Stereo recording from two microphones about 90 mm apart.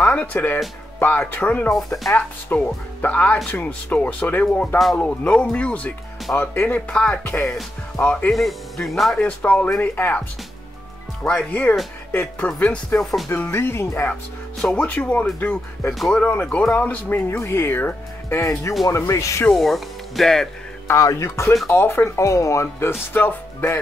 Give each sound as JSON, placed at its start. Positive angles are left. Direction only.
{"t": 0.0, "sound": "speech", "side_deg": 20}
{"t": 8.3, "sound": "speech", "side_deg": 0}
{"t": 9.2, "sound": "speech", "side_deg": 15}
{"t": 11.2, "sound": "speech", "side_deg": 15}
{"t": 13.0, "sound": "speech", "side_deg": 0}
{"t": 13.3, "sound": "speech", "side_deg": 25}
{"t": 14.6, "sound": "speech", "side_deg": 15}
{"t": 16.7, "sound": "speech", "side_deg": 20}
{"t": 18.4, "sound": "speech", "side_deg": 35}
{"t": 19.5, "sound": "speech", "side_deg": 0}
{"t": 20.8, "sound": "speech", "side_deg": 35}